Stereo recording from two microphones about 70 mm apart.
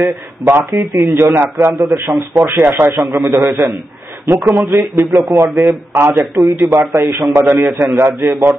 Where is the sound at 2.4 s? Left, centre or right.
Right.